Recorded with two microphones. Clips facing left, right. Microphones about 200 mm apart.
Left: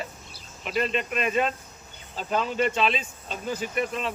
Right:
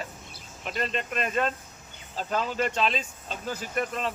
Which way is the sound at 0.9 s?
35° right (ahead or behind).